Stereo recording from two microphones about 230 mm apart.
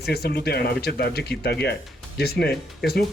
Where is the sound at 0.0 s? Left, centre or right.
Left.